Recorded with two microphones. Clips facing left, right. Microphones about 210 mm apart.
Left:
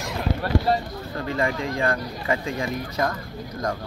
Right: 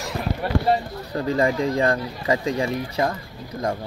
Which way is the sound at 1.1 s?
40° right (ahead or behind).